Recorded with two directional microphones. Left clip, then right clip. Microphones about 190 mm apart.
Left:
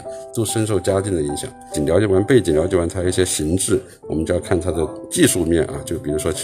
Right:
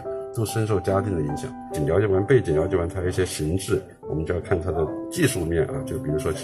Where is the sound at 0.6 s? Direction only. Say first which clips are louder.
Left 3 dB; 50° left (ahead or behind).